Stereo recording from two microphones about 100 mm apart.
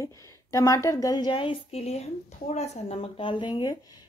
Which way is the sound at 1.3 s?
75° left (ahead or behind).